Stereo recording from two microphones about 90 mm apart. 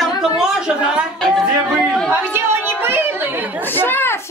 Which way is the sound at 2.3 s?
25° right (ahead or behind).